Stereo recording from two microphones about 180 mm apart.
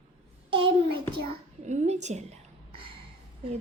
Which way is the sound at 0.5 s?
25° right (ahead or behind).